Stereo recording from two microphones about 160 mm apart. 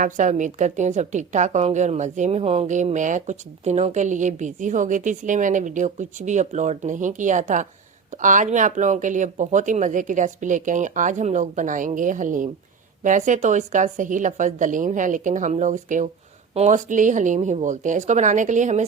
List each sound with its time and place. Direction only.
0.0 s a woman's voice: 50° right (ahead or behind)